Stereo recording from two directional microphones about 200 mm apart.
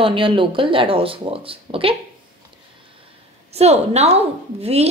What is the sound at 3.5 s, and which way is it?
A woman's voice, 30° right (ahead or behind).